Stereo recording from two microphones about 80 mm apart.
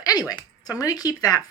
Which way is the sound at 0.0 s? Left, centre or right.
Left.